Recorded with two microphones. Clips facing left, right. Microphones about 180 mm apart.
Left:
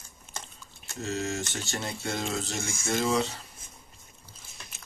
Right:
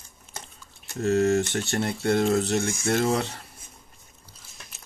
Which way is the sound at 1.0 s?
55° right (ahead or behind).